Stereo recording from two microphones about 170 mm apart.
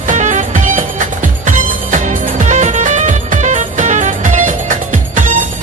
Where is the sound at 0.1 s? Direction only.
45° right (ahead or behind).